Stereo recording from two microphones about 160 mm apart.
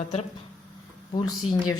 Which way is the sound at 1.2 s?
25° left (ahead or behind).